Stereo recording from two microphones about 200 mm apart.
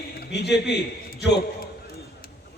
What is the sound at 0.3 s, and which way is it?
Speech, 60° left (ahead or behind).